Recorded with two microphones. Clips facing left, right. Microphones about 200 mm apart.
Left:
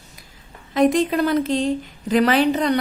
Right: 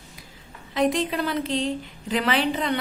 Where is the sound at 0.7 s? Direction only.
45° left (ahead or behind).